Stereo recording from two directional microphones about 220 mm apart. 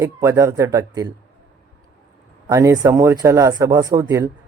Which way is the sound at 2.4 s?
15° right (ahead or behind).